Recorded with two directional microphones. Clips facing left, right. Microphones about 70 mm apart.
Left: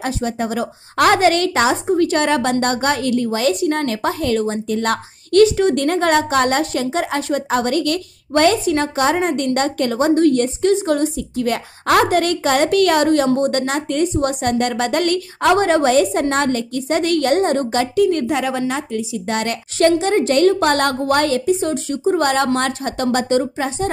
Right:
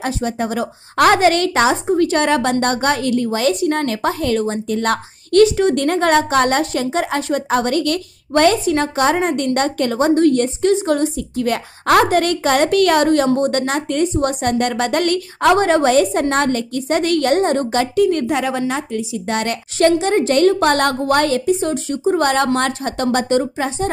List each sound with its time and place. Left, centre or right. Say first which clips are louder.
0.0 s a woman's voice: right 1 dB; right
5.8 s a woman's voice: right 1 dB; right
11.3 s a woman's voice: right 1 dB; right